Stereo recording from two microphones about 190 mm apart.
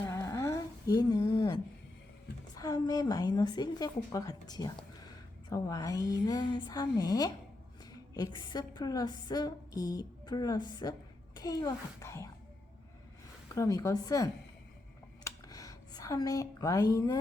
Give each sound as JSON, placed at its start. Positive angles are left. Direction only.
{"t": 0.0, "sound": "humming", "side_deg": 15}
{"t": 2.6, "sound": "a woman's voice", "side_deg": 20}
{"t": 13.5, "sound": "a child's voice", "side_deg": 15}
{"t": 15.2, "sound": "a sound", "side_deg": 20}